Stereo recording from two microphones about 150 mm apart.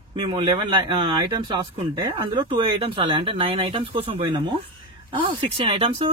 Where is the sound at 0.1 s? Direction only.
35° right (ahead or behind).